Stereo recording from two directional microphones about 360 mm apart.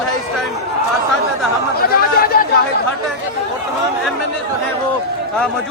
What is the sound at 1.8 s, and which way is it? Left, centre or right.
Chatter, left.